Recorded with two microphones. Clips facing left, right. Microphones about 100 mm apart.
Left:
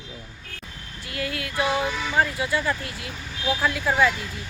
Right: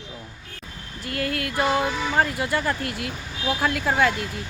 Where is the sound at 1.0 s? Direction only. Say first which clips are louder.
Right 4 dB; 50° right (ahead or behind).